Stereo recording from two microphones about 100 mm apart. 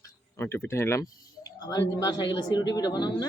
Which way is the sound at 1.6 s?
40° left (ahead or behind).